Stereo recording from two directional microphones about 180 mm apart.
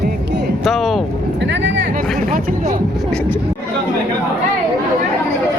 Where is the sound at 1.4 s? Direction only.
80° right.